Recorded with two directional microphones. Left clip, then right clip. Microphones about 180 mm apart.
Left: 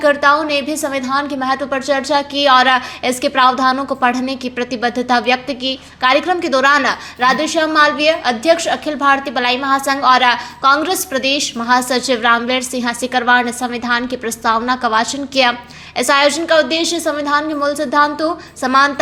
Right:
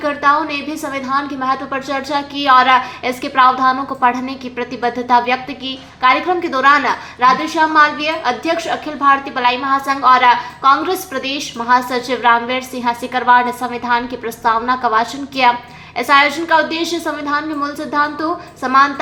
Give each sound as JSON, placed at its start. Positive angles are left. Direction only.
{"t": 0.0, "sound": "a woman's voice", "side_deg": 45}